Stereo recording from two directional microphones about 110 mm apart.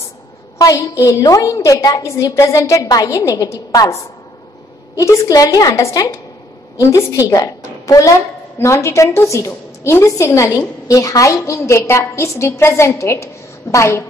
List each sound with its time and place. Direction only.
0.6 s a woman's voice: 30° left (ahead or behind)